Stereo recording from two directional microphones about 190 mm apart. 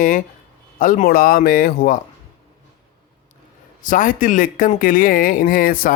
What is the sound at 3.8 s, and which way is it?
Speech, 45° left (ahead or behind).